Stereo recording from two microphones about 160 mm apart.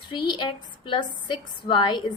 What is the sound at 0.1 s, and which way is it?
A woman's voice, 30° left (ahead or behind).